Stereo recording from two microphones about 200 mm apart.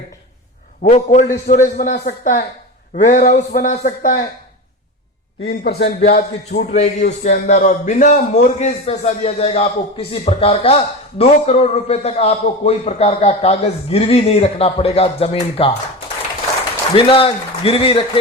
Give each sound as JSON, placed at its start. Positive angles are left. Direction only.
{"t": 0.8, "sound": "a man's voice", "side_deg": 35}
{"t": 5.5, "sound": "a man's voice", "side_deg": 55}
{"t": 6.6, "sound": "a man's voice", "side_deg": 35}
{"t": 16.9, "sound": "a man's voice", "side_deg": 30}